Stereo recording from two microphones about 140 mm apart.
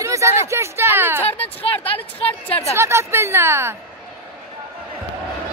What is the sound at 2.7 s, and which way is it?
Speech, 20° right (ahead or behind).